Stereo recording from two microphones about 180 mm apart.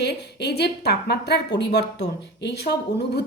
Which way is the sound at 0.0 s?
70° left (ahead or behind).